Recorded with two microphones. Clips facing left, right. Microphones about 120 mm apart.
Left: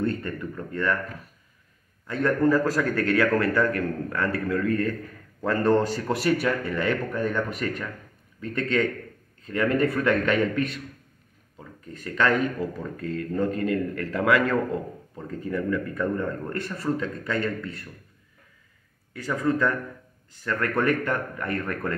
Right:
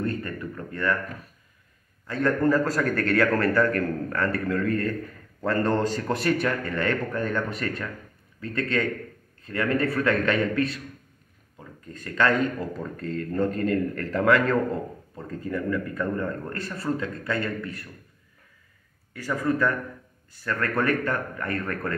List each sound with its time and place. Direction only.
0.0 s a sound: 25° left (ahead or behind)
2.0 s a man's voice: 20° left (ahead or behind)
11.9 s a man's voice: 15° left (ahead or behind)
19.1 s speech: 20° left (ahead or behind)